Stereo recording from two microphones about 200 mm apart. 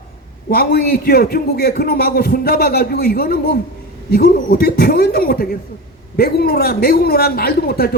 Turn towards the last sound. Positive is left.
turn(degrees=50)  # may be behind; listen again after turning